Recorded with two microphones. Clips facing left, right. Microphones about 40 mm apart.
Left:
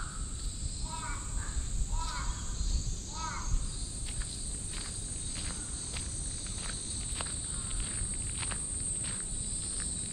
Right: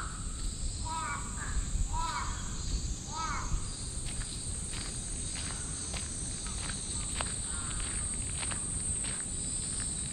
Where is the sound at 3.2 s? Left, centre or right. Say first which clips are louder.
Right 3 dB; centre.